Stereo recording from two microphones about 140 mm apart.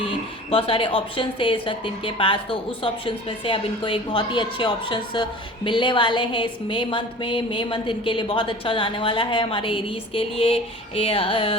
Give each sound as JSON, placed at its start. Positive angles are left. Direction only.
{"t": 0.5, "sound": "a woman's voice", "side_deg": 40}